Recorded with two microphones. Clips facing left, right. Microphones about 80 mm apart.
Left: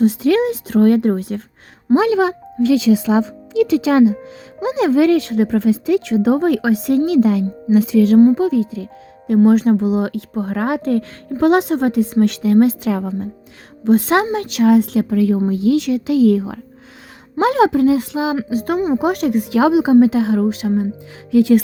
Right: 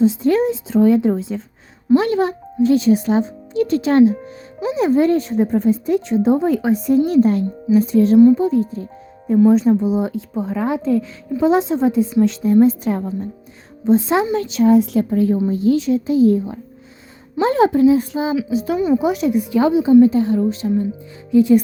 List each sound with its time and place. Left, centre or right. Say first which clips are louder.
0.0 s speech: left 1 dB; left
2.1 s a child's voice: left 2 dB; left
12.2 s speech: even; left
13.8 s speech: left 1 dB; left
18.3 s a woman's voice: even; left
19.0 s a woman's voice: left 1 dB; left